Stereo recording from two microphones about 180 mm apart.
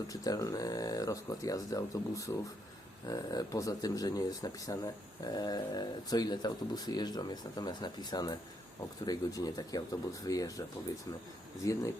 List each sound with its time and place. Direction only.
0.1 s speech: 20° left (ahead or behind)
11.6 s speech: 15° left (ahead or behind)